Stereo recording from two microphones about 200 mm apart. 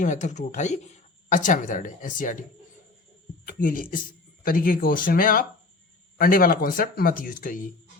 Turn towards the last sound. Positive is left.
turn(degrees=40)  # may be behind; listen again after turning